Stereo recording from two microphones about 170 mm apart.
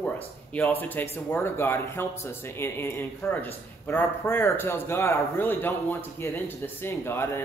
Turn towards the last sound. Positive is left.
turn(degrees=15)  # may be behind; listen again after turning